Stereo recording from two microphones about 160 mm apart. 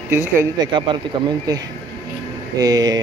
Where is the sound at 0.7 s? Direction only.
30° right (ahead or behind).